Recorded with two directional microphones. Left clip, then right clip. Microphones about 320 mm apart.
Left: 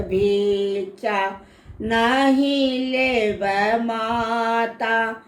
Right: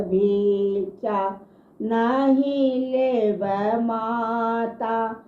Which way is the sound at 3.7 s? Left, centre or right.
Left.